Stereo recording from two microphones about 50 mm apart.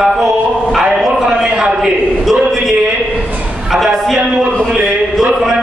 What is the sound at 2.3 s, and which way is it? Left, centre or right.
Speech, centre.